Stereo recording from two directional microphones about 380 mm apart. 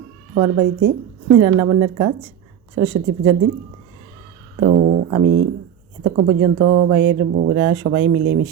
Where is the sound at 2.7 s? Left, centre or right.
Right.